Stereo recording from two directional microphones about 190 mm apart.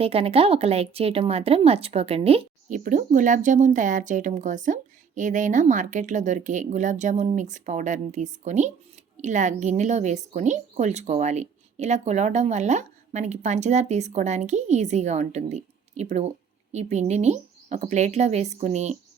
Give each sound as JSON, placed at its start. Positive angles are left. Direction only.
{"t": 0.0, "sound": "a woman's voice", "side_deg": -30}
{"t": 2.6, "sound": "a woman's voice", "side_deg": -45}